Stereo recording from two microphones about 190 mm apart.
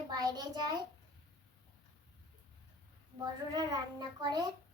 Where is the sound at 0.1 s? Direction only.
20° right (ahead or behind).